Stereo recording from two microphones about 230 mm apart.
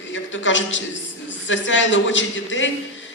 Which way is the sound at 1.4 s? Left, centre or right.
Left.